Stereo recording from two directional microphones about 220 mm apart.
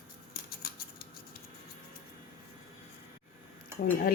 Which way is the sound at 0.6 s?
45° left (ahead or behind).